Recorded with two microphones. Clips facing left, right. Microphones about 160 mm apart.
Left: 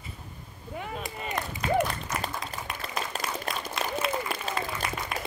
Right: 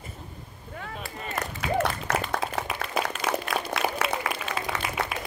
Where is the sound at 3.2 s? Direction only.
75° right (ahead or behind).